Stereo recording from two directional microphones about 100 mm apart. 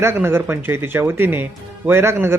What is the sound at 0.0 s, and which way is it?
Speech, 25° right (ahead or behind).